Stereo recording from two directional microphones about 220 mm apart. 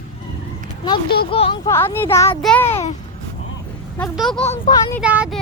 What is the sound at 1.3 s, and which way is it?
Speech, 25° left (ahead or behind).